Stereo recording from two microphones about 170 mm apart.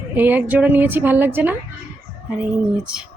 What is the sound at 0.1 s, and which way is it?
A woman's voice, 10° right (ahead or behind).